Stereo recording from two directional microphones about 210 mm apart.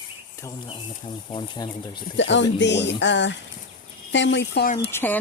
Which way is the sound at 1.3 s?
20° left (ahead or behind).